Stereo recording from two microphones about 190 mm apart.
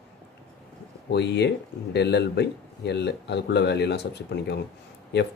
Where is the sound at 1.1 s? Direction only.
65° left (ahead or behind).